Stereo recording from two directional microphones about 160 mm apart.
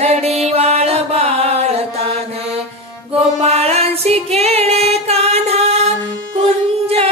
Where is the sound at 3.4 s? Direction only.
40° right (ahead or behind).